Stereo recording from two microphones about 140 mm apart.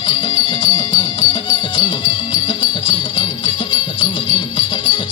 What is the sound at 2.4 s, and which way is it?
Jingle bell, 40° left (ahead or behind).